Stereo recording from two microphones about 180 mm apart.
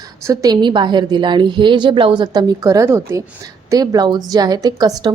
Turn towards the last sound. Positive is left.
turn(degrees=-20)  # may be behind; listen again after turning